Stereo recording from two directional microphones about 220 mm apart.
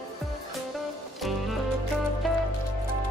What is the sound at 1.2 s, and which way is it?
Music, centre (ahead or behind).